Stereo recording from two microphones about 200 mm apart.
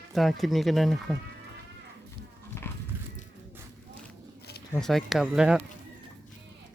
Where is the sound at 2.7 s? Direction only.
10° left (ahead or behind).